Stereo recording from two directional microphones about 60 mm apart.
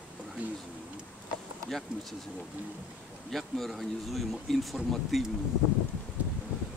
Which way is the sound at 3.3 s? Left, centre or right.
Centre.